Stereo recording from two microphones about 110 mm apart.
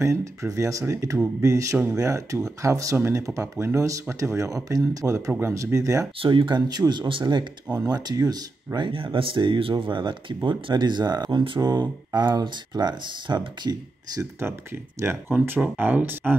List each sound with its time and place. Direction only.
0.0 s speech: 25° right (ahead or behind)
6.2 s speech: 50° right (ahead or behind)
7.7 s speech: 35° right (ahead or behind)
11.6 s speech: 35° right (ahead or behind)
15.0 s speech: 20° right (ahead or behind)